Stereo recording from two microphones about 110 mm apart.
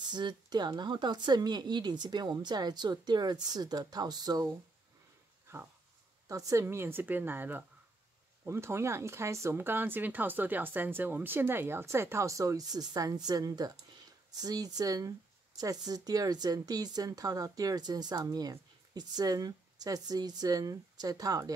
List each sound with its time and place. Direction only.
0.1 s speech: 40° right (ahead or behind)
6.5 s speech: 25° right (ahead or behind)